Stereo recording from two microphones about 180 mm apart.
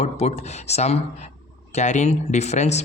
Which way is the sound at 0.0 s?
35° left (ahead or behind).